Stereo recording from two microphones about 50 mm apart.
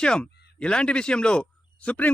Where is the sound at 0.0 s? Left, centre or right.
Centre.